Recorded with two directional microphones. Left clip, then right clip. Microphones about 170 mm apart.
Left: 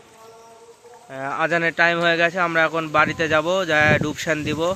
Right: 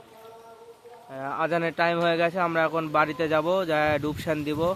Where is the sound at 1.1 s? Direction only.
15° left (ahead or behind).